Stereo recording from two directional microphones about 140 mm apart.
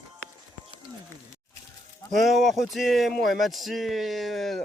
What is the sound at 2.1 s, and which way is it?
Speech, centre (ahead or behind).